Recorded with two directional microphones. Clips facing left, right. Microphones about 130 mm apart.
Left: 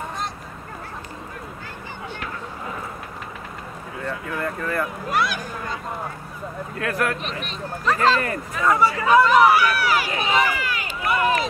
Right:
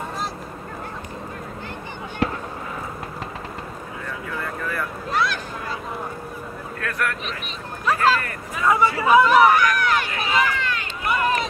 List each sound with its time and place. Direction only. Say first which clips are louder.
2.2 s fireworks: right 13 dB; 35° right (ahead or behind)
4.7 s speech: even; 10° left (ahead or behind)
6.9 s speech: left 3 dB; 30° left (ahead or behind)
7.4 s speech: even; 10° right (ahead or behind)
10.1 s run: left 1 dB; 20° left (ahead or behind)
10.4 s run: even; 10° left (ahead or behind)